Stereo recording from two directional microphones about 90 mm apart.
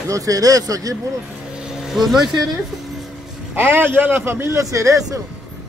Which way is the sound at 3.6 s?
25° right (ahead or behind).